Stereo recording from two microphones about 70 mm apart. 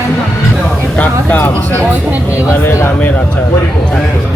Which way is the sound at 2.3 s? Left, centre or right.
Left.